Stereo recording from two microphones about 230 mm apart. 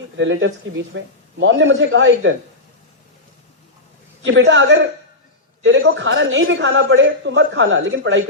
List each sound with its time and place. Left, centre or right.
0.2 s a man's voice: right
4.2 s a man's voice: right